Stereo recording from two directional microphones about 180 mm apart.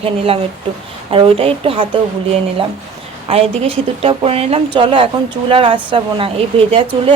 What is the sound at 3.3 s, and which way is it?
Speech, 30° right (ahead or behind).